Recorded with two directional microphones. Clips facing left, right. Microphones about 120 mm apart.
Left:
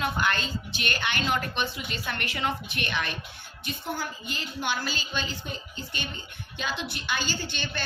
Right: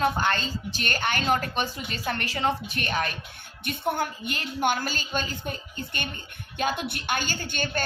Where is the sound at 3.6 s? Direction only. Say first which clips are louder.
Right 6 dB; 60° right (ahead or behind).